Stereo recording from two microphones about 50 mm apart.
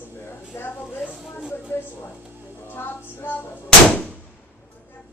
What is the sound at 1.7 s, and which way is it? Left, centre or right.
Music, left.